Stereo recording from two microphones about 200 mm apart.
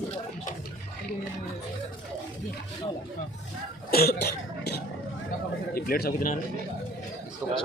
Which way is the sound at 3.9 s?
50° left (ahead or behind).